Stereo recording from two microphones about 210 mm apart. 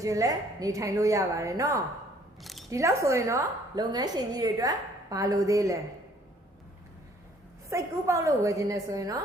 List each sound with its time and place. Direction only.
0.0 s a woman's voice: 15° right (ahead or behind)
2.4 s camera: centre (ahead or behind)
2.6 s a woman's voice: 15° right (ahead or behind)
7.7 s a woman's voice: 15° right (ahead or behind)